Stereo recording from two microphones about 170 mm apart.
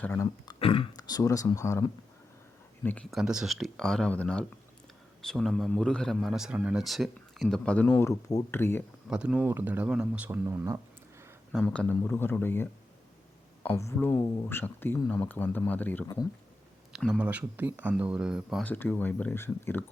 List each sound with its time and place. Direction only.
0.0 s speech: 10° left (ahead or behind)
0.6 s speech: 35° left (ahead or behind)
0.9 s speech: 20° left (ahead or behind)
2.8 s speech: 5° left (ahead or behind)
9.0 s speech: 5° right (ahead or behind)
11.6 s speech: 10° left (ahead or behind)
16.9 s speech: 5° right (ahead or behind)
18.6 s speech: 10° left (ahead or behind)